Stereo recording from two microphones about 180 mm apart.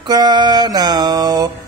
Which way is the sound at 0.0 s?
25° right (ahead or behind).